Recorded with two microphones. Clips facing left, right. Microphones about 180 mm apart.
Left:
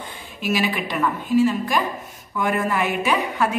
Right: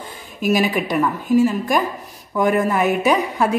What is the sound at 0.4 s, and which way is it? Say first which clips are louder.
Speech: right 5 dB; 45° right (ahead or behind).